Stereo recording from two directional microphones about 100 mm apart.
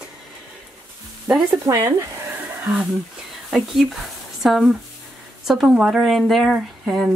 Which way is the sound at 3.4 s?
5° right (ahead or behind).